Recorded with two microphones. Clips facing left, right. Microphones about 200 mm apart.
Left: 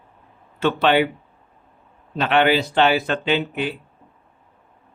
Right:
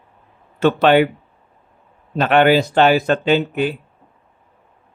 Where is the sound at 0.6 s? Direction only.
45° right (ahead or behind).